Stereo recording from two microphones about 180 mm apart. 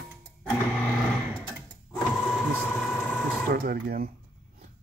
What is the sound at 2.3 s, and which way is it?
Vehicle, centre (ahead or behind).